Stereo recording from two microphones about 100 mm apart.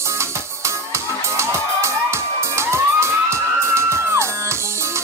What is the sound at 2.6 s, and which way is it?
Music, 25° right (ahead or behind).